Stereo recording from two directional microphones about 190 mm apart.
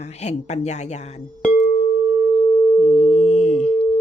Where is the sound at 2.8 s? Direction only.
40° left (ahead or behind).